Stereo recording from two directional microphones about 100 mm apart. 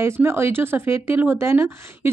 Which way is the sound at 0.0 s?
25° right (ahead or behind).